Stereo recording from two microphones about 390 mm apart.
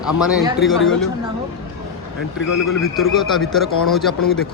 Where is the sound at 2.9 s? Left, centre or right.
Centre.